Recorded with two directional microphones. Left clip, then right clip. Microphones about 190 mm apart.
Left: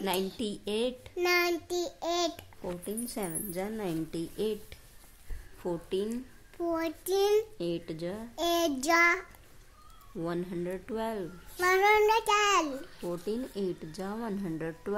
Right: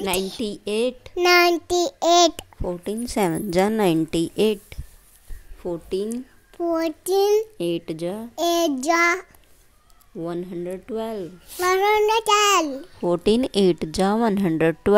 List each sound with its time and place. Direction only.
0.4 s a child's voice: 30° right (ahead or behind)
5.6 s a child's voice: 25° right (ahead or behind)
13.1 s a child's voice: 50° right (ahead or behind)